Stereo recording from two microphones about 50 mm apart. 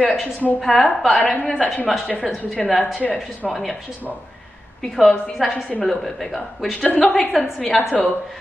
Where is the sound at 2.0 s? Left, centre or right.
Left.